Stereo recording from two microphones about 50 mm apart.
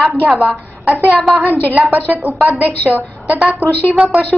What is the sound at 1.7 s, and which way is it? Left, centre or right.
Speech, right.